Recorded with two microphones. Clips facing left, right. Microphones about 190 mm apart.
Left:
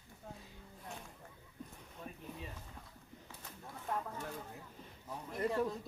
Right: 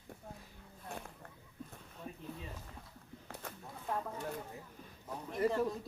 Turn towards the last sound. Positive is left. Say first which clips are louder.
# right 4 dB
turn(degrees=-5)  # may be behind; listen again after turning